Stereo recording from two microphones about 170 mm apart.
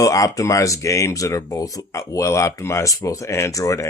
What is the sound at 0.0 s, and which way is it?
Speech, 20° left (ahead or behind).